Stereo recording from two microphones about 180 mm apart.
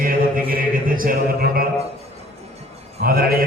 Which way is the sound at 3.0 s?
55° right (ahead or behind).